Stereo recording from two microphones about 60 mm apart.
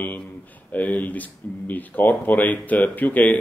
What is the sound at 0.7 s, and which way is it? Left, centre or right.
Speech, left.